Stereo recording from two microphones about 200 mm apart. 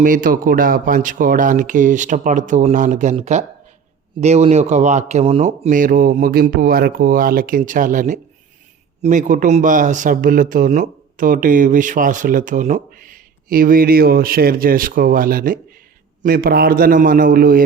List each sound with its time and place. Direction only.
0.0 s a man's voice: 40° right (ahead or behind)